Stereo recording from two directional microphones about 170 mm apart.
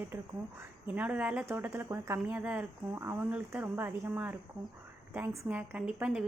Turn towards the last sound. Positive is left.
turn(degrees=-5)  # may be behind; listen again after turning